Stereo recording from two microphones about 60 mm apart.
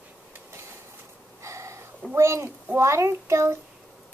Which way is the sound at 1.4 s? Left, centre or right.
Right.